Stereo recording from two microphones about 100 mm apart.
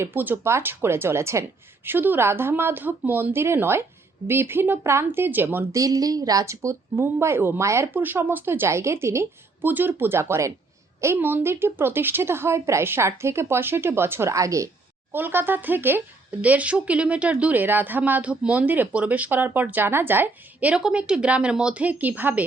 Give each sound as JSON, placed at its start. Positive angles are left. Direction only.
{"t": 0.0, "sound": "speech", "side_deg": -20}
{"t": 5.7, "sound": "speech", "side_deg": -35}
{"t": 15.1, "sound": "speech", "side_deg": -20}